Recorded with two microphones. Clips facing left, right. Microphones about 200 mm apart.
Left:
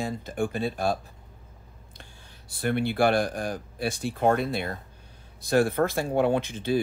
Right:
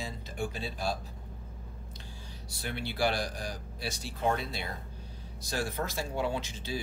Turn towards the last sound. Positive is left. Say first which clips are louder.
# left 11 dB
turn(degrees=55)  # may be behind; listen again after turning